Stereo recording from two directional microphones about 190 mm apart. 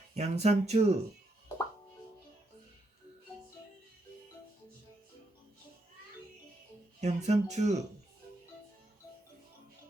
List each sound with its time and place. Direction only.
0.1 s speech: 35° right (ahead or behind)
7.0 s speech: 35° right (ahead or behind)